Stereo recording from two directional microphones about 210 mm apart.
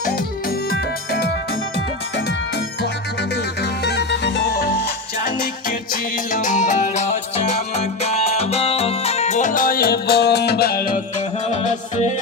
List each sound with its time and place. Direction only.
0.7 s music: 45° left (ahead or behind)
3.3 s music: 50° left (ahead or behind)
11.4 s music: 35° left (ahead or behind)